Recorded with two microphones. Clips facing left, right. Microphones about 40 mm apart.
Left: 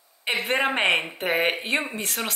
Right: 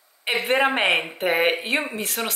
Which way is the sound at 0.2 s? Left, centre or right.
Centre.